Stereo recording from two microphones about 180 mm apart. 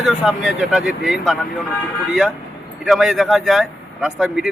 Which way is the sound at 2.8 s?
Centre (ahead or behind).